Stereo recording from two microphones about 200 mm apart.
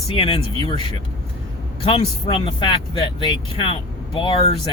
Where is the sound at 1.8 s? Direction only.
25° left (ahead or behind).